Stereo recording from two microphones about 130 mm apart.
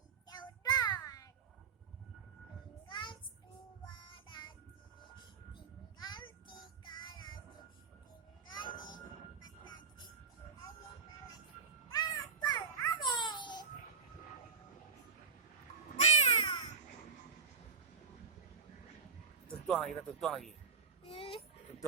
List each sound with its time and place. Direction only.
0.3 s child singing: 30° left (ahead or behind)
2.8 s child singing: 40° left (ahead or behind)
5.5 s child singing: 35° left (ahead or behind)
8.5 s a sound: 35° left (ahead or behind)
9.4 s music: 35° left (ahead or behind)
11.9 s music: 30° left (ahead or behind)
16.0 s cat: 55° left (ahead or behind)
19.5 s speech: 5° left (ahead or behind)
21.1 s a sound: 45° left (ahead or behind)